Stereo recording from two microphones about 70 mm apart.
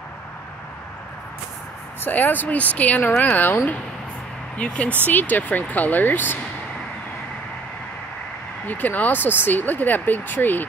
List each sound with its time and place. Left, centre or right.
2.0 s speech: left
4.6 s speech: centre
8.6 s speech: left